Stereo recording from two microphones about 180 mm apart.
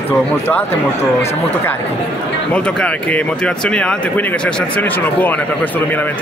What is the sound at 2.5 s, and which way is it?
Speech, 5° left (ahead or behind).